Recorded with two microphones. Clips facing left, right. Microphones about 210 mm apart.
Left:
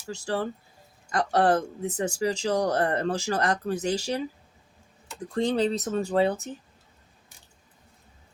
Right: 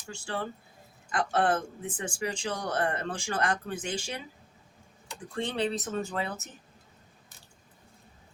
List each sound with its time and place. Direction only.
0.1 s speech: 40° left (ahead or behind)
5.3 s speech: 40° left (ahead or behind)